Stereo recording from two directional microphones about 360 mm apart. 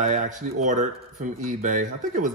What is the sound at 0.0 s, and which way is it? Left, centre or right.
Speech, centre.